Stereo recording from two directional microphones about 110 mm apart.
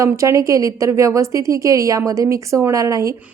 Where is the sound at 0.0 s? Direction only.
30° right (ahead or behind).